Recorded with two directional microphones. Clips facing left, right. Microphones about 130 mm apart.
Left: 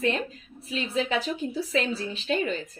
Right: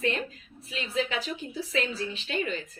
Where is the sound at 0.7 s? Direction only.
35° left (ahead or behind).